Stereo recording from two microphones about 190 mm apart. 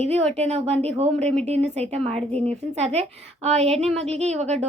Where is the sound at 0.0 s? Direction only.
35° right (ahead or behind).